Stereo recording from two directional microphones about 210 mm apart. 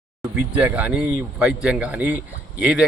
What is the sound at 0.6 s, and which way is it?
A man's voice, 5° right (ahead or behind).